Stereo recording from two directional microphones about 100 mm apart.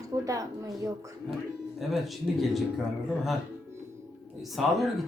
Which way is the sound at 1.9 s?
Centre (ahead or behind).